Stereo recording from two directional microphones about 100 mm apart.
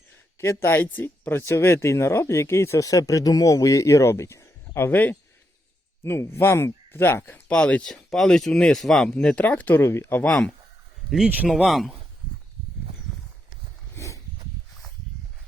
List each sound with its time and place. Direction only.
0.3 s speech: 25° left (ahead or behind); by 9.1 s 5° left (ahead or behind)
9.1 s speech: 15° left (ahead or behind)
10.2 s speech: 10° left (ahead or behind)
11.4 s speech: centre (ahead or behind)
13.9 s a sound: 30° left (ahead or behind)